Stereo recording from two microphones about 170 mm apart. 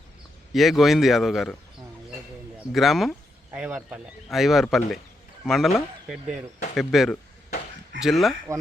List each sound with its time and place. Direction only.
0.5 s speech: centre (ahead or behind)
2.7 s speech: centre (ahead or behind)